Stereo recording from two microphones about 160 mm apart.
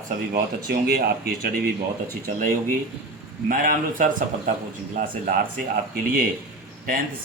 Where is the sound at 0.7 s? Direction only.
75° right (ahead or behind).